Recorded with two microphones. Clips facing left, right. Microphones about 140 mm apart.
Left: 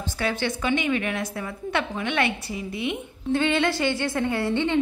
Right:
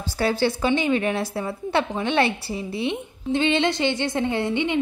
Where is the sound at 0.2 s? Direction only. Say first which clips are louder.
Right 5 dB; 35° right (ahead or behind).